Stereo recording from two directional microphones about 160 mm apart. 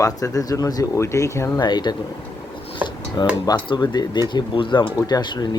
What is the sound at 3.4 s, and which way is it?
Speech, 25° left (ahead or behind).